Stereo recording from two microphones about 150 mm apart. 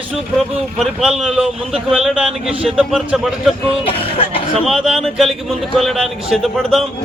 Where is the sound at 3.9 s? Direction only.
40° left (ahead or behind).